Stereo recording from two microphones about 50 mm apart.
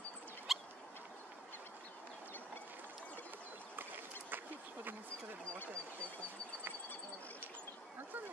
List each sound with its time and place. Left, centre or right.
0.5 s cat: centre
3.7 s boat: right